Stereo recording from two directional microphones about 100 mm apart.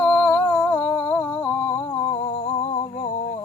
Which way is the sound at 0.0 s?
15° left (ahead or behind).